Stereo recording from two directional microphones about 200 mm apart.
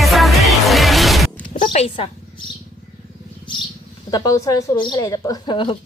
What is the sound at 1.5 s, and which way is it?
Purr, 30° left (ahead or behind).